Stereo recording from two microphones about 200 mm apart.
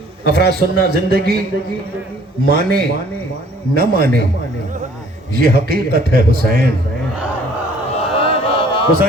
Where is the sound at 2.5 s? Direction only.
50° right (ahead or behind).